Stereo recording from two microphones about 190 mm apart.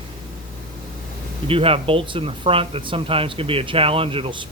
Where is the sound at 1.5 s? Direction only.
30° right (ahead or behind).